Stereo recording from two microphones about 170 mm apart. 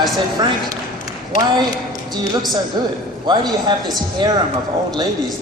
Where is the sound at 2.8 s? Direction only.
25° right (ahead or behind).